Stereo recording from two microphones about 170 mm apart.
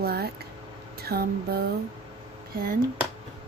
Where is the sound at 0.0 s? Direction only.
65° right (ahead or behind).